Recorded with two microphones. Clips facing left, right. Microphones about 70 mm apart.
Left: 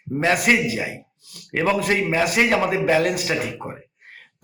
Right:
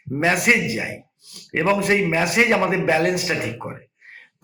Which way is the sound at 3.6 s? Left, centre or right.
Centre.